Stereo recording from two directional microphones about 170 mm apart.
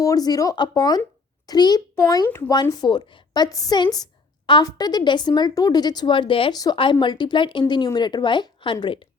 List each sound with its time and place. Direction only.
0.0 s a woman's voice: 20° left (ahead or behind)